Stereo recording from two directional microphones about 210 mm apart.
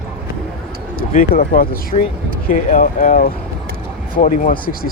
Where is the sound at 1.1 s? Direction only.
40° left (ahead or behind).